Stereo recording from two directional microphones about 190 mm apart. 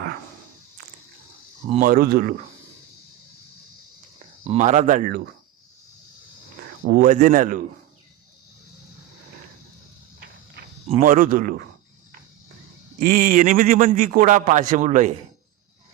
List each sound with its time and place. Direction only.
1.8 s a man's voice: 45° right (ahead or behind)
4.4 s speech: 40° right (ahead or behind)
6.9 s a man's voice: 45° right (ahead or behind)
11.0 s a man's voice: 45° right (ahead or behind)
13.0 s a man's voice: 50° right (ahead or behind)